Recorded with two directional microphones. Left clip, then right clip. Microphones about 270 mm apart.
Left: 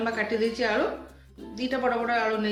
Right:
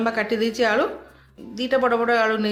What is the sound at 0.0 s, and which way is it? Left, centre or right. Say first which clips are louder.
Speech: right 4 dB; right.